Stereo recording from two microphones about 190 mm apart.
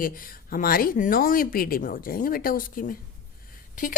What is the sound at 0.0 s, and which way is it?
A woman's voice, 50° left (ahead or behind).